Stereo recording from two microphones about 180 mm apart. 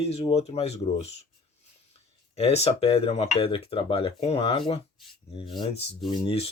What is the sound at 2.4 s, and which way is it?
Speech, 35° left (ahead or behind).